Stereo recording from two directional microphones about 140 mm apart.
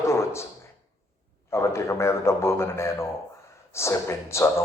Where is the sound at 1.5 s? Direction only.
20° left (ahead or behind).